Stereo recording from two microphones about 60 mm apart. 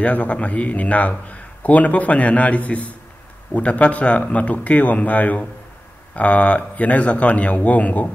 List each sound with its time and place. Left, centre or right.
0.0 s a man's voice: left